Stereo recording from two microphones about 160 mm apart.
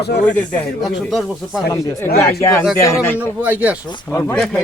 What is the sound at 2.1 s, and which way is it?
Speech, 80° left.